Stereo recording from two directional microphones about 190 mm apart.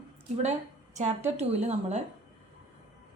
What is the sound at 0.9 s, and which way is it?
A woman's voice, 35° right (ahead or behind).